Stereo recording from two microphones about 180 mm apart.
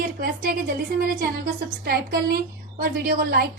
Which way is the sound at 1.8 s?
60° right (ahead or behind).